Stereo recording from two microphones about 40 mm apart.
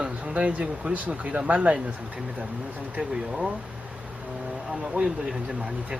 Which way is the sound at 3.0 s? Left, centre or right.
Right.